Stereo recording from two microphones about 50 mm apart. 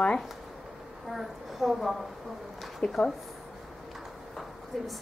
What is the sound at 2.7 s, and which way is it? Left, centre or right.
Speech, centre.